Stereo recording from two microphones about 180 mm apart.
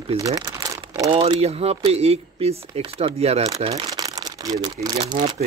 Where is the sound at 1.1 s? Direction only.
30° right (ahead or behind).